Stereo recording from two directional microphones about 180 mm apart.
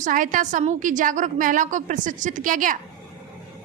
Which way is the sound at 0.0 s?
45° right (ahead or behind).